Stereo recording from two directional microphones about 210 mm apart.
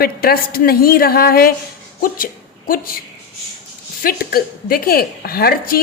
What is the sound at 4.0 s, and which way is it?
A woman's voice, 45° left (ahead or behind).